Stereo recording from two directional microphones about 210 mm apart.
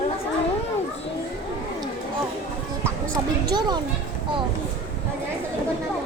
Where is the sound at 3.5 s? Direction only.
20° right (ahead or behind).